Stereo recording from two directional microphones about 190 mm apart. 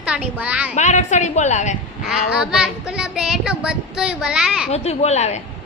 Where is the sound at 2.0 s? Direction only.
5° right (ahead or behind).